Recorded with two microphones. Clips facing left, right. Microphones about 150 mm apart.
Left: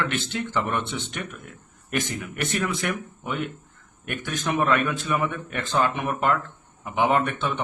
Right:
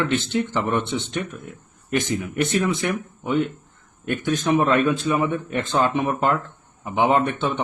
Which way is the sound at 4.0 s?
25° right (ahead or behind).